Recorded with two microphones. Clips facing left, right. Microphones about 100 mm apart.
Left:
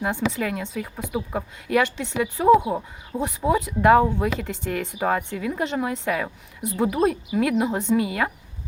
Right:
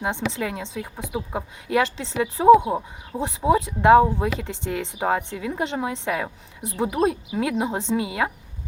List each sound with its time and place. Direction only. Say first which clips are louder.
0.0 s speech: left 1 dB; 25° right (ahead or behind)